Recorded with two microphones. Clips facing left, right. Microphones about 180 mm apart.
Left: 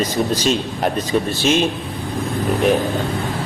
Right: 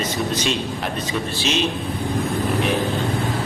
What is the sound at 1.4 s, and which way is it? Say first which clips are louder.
Speech: left 5 dB; 50° left (ahead or behind).